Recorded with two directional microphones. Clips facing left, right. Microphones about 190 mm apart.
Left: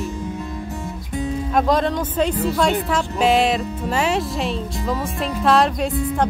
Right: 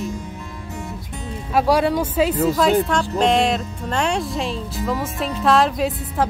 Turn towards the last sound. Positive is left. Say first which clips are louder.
# left 1 dB
turn(degrees=0)  # may be behind; listen again after turning